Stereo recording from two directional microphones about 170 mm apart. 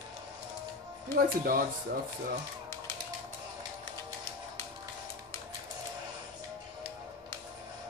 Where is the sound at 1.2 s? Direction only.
55° right (ahead or behind).